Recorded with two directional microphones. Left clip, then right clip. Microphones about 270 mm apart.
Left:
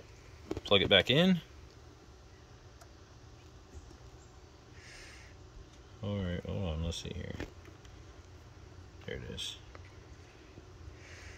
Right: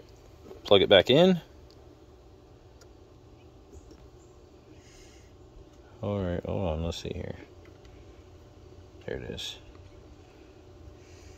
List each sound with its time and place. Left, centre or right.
0.7 s speech: right
6.0 s a sound: right
6.8 s speech: right
9.2 s speech: centre